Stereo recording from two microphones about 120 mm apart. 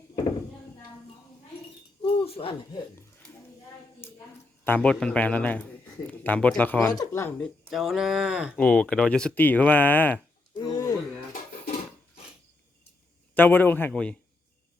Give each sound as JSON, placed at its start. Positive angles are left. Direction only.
{"t": 2.2, "sound": "speech", "side_deg": 50}
{"t": 4.6, "sound": "speech", "side_deg": 15}
{"t": 6.8, "sound": "speech", "side_deg": 30}
{"t": 7.3, "sound": "speech", "side_deg": 5}
{"t": 8.5, "sound": "speech", "side_deg": 10}
{"t": 10.5, "sound": "a sound", "side_deg": 35}
{"t": 13.3, "sound": "speech", "side_deg": 15}